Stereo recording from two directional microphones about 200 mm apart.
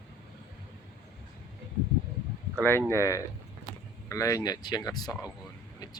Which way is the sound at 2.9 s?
15° left (ahead or behind).